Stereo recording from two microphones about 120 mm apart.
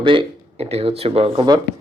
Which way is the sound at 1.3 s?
35° right (ahead or behind).